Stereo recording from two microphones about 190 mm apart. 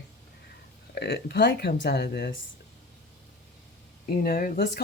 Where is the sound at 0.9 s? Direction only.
60° left (ahead or behind).